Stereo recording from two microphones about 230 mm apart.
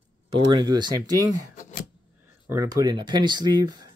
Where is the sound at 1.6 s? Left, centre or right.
Left.